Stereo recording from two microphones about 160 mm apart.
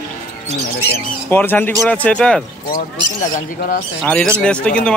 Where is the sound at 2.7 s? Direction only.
55° left (ahead or behind).